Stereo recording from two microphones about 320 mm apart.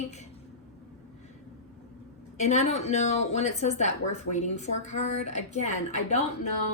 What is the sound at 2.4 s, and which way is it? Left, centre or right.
A woman's voice, left.